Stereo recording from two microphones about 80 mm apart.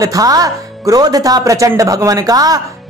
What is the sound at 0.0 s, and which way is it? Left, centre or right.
Speech, right.